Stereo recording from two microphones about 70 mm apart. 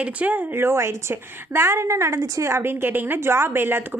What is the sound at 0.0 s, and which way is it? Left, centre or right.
A woman's voice, right.